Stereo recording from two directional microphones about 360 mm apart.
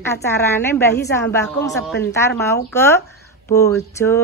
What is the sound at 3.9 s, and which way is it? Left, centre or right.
Speech, centre.